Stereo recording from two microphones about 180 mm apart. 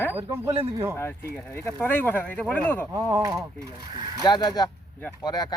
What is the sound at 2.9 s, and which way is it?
Speech, 20° right (ahead or behind).